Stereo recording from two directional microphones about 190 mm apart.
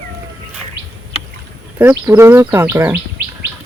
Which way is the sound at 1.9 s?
15° right (ahead or behind).